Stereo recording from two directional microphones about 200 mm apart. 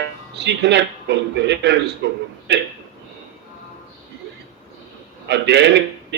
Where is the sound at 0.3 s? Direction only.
60° right (ahead or behind).